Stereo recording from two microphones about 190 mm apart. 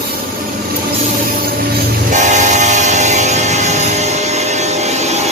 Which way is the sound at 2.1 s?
40° right (ahead or behind).